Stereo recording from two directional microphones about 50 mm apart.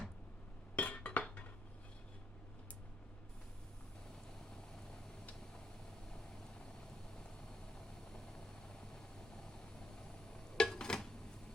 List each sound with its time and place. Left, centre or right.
0.8 s chink: left
7.8 s vehicle: centre
9.9 s a sound: centre